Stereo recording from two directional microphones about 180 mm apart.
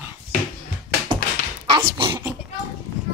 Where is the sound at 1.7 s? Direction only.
30° right (ahead or behind).